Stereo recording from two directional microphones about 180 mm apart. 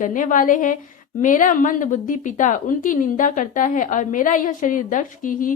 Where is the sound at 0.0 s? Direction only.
45° left (ahead or behind).